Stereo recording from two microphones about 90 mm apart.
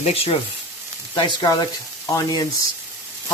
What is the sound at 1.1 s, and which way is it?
Speech, 55° left (ahead or behind).